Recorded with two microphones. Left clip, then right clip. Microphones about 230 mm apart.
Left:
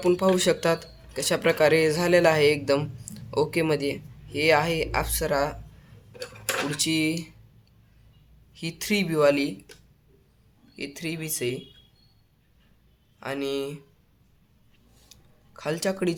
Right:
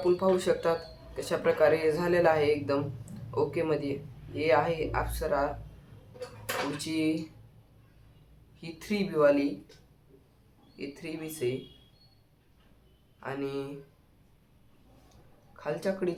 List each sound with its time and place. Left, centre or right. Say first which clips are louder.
0.0 s speech: left 4 dB; left
6.7 s speech: left 6 dB; left
8.6 s speech: left 7 dB; left
10.8 s speech: left 5 dB; left
13.1 s a man's voice: left 6 dB; left
15.5 s speech: left 4 dB; left